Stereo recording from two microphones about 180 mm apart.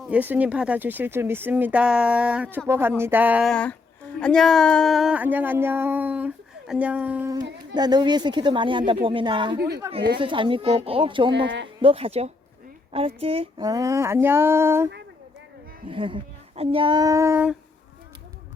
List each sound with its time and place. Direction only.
0.1 s a sound: 10° right (ahead or behind)
3.5 s a sound: 10° left (ahead or behind); by 7.4 s 15° right (ahead or behind)
7.7 s speech: 25° right (ahead or behind)
9.6 s speech: 65° right (ahead or behind)
10.2 s speech: 30° right (ahead or behind)
11.4 s speech: 85° right
11.8 s speech: 30° right (ahead or behind)
13.7 s a sound: 20° right (ahead or behind)
15.9 s speech: 30° right (ahead or behind); by 17.6 s 10° right (ahead or behind)